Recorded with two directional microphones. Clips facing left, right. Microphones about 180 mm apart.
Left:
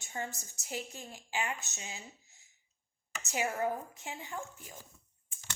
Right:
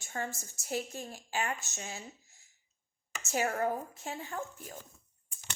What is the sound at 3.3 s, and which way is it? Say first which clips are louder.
Speech: right 2 dB; 50° right (ahead or behind).